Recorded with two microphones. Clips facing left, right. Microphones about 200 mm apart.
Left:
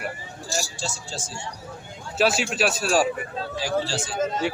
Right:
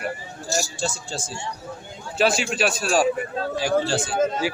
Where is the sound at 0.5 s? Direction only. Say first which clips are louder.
Right 4 dB; 55° right (ahead or behind).